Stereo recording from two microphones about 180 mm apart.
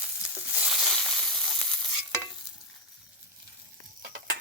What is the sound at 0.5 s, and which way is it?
Frying, centre (ahead or behind).